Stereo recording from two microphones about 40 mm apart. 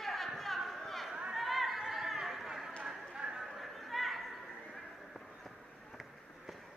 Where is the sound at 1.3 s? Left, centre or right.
Centre.